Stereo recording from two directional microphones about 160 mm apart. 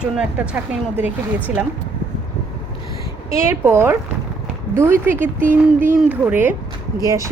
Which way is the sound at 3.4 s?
15° right (ahead or behind).